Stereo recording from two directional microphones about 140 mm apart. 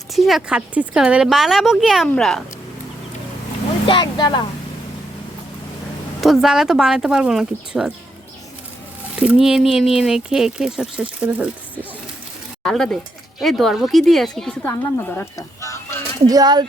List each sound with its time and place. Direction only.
0.1 s speech: centre (ahead or behind)
3.8 s speech: 35° left (ahead or behind)
6.2 s speech: centre (ahead or behind)
9.1 s speech: 5° right (ahead or behind)
12.6 s speech: 5° left (ahead or behind)
14.6 s speech: 15° left (ahead or behind)
16.2 s speech: 25° right (ahead or behind)